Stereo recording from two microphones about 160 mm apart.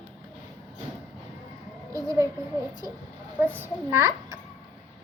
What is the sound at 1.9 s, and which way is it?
Speech, 20° right (ahead or behind).